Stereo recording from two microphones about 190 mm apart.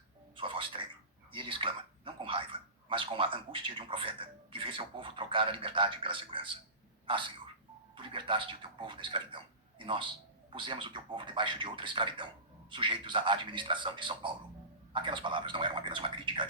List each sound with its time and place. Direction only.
0.3 s television: 25° right (ahead or behind)
1.3 s speech: 25° right (ahead or behind)
7.9 s doorbell: 25° right (ahead or behind)
8.8 s speech: 25° right (ahead or behind)